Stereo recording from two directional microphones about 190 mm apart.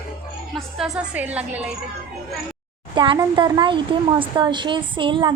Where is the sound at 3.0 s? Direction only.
25° right (ahead or behind).